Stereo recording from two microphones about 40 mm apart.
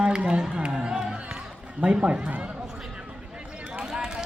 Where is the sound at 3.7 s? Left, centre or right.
Right.